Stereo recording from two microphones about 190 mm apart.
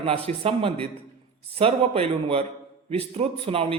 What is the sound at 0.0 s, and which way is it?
A man's voice, 30° right (ahead or behind).